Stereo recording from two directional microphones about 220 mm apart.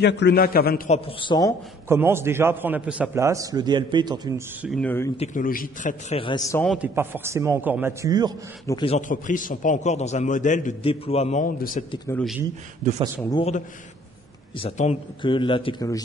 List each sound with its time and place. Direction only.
0.0 s a man's voice: 50° left (ahead or behind)
0.9 s a man's voice: 25° left (ahead or behind)
1.9 s a man's voice: 10° right (ahead or behind)
4.6 s speech: centre (ahead or behind)
5.1 s a man's voice: 30° left (ahead or behind); by 6.6 s 15° left (ahead or behind)
6.6 s speech: centre (ahead or behind)
7.0 s a man's voice: 10° right (ahead or behind)
8.6 s a man's voice: 25° left (ahead or behind); by 11.8 s 40° left (ahead or behind)
12.1 s speech: 5° left (ahead or behind)
14.6 s a man's voice: 25° left (ahead or behind)